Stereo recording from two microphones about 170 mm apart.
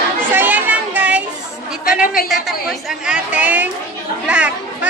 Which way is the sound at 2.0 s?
55° left (ahead or behind).